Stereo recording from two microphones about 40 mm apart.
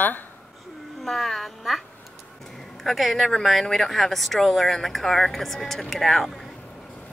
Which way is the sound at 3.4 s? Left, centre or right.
Centre.